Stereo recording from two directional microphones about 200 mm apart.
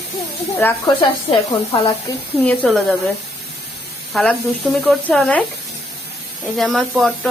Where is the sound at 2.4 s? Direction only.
5° left (ahead or behind).